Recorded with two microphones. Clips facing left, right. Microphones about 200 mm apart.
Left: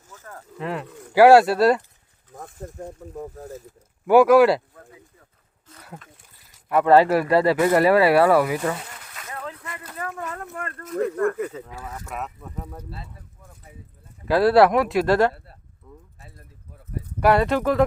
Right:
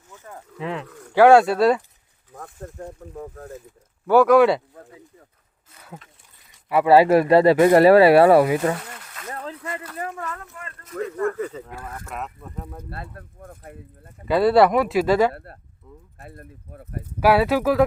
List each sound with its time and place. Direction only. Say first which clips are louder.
0.6 s speech: even; 5° left (ahead or behind)
6.5 s a sound: right 1 dB; 5° right (ahead or behind)
7.1 s speech: right 4 dB; 25° right (ahead or behind)
9.3 s a sound: right 3 dB; 35° right (ahead or behind)
10.0 s speech: left 1 dB; 25° right (ahead or behind)
10.4 s speech: left 7 dB; 55° left (ahead or behind)
11.3 s speech: even; 10° left (ahead or behind)
12.9 s speech: right 4 dB; 55° right (ahead or behind)
14.3 s speech: even; centre (ahead or behind)
15.3 s speech: right 4 dB; 60° right (ahead or behind)
17.2 s speech: right 1 dB; 5° right (ahead or behind)